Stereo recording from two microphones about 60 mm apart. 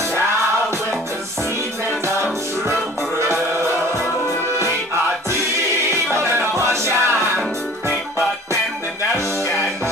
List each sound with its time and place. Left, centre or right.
3.2 s music: right
5.9 s music: right